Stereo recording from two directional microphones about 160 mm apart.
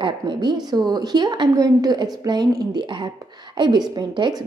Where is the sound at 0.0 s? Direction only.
30° right (ahead or behind).